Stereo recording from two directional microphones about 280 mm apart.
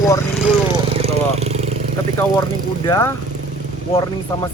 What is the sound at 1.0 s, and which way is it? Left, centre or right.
Vehicle, right.